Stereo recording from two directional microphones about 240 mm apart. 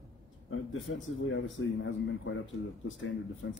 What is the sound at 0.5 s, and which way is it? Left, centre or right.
A man's voice, left.